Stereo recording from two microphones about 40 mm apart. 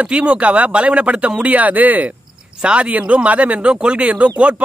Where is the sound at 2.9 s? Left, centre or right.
Right.